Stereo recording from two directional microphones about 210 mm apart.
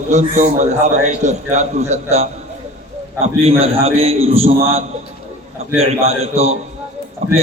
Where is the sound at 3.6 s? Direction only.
30° right (ahead or behind).